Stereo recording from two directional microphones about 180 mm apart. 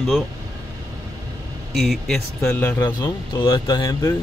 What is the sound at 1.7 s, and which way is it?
Speech, centre (ahead or behind).